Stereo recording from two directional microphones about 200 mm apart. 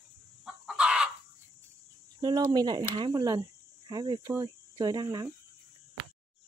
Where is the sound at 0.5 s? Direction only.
5° right (ahead or behind).